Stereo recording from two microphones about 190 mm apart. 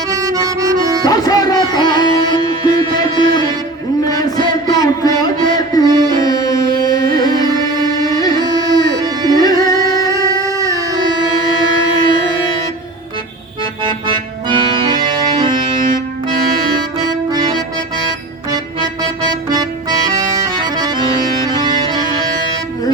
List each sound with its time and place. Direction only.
0.1 s music: 20° right (ahead or behind)
1.0 s music: 20° left (ahead or behind)
5.8 s music: 20° right (ahead or behind)
6.1 s music: 20° left (ahead or behind)
7.4 s music: 20° right (ahead or behind)
8.0 s music: 20° left (ahead or behind)
8.4 s music: 20° right (ahead or behind)
8.6 s music: 20° left (ahead or behind)
9.0 s music: 20° right (ahead or behind)
9.4 s music: 20° left (ahead or behind)
13.8 s accordion: 25° right (ahead or behind)
16.6 s accordion: 20° right (ahead or behind)
19.3 s accordion: 20° right (ahead or behind)
21.5 s music: 25° right (ahead or behind)